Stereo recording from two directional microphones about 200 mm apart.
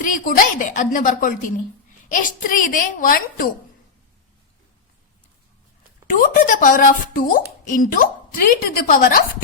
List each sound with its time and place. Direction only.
0.0 s a woman's voice: 40° left (ahead or behind)
6.1 s speech: 45° left (ahead or behind)